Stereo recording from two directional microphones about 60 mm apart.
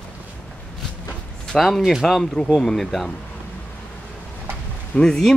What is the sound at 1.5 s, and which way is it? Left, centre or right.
Speech, centre.